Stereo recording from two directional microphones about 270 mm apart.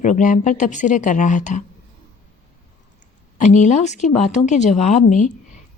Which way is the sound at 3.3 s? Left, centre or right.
Left.